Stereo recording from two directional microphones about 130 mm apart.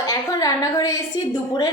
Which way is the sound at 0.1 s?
30° left (ahead or behind).